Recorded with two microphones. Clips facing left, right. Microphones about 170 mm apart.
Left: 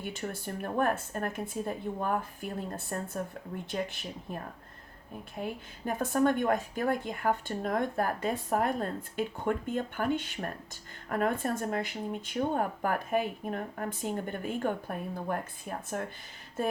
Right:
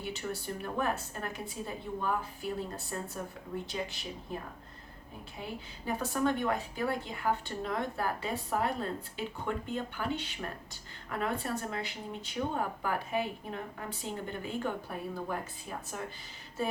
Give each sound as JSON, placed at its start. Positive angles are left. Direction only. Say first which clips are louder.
{"t": 0.0, "sound": "a woman's voice", "louder": "left 1 dB", "side_deg": 50}
{"t": 5.4, "sound": "a woman's voice", "louder": "left 5 dB", "side_deg": 50}